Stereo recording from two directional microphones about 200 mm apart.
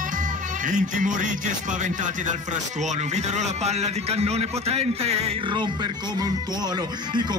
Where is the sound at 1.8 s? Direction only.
40° right (ahead or behind).